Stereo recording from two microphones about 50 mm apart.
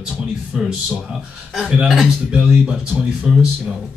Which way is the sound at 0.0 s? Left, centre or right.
Centre.